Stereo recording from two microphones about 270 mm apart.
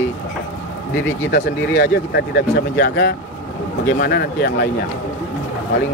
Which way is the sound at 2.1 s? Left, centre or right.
Left.